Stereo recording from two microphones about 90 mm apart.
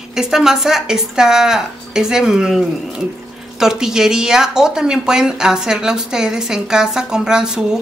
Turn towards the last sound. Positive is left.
turn(degrees=-10)  # may be behind; listen again after turning